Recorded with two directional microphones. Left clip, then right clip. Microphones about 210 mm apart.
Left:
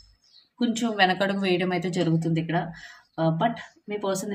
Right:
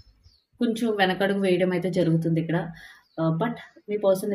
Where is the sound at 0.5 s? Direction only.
20° left (ahead or behind).